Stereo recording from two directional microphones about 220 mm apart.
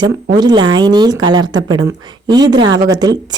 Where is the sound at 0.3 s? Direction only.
20° right (ahead or behind).